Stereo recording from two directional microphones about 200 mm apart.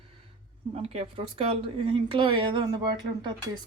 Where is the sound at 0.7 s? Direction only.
30° right (ahead or behind).